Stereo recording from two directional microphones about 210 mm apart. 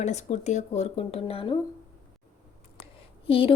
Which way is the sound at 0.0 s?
35° left (ahead or behind).